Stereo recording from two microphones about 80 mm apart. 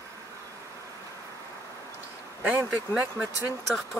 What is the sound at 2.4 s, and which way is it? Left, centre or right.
Speech, right.